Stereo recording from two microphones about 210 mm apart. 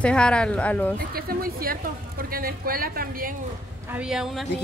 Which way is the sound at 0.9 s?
45° right (ahead or behind).